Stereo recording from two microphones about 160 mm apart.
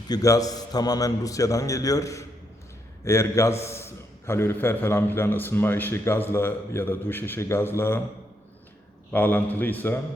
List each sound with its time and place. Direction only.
0.1 s a man's voice: 20° left (ahead or behind)
9.1 s a man's voice: 10° left (ahead or behind)